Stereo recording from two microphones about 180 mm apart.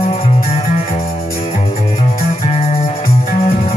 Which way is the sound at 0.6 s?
55° left (ahead or behind).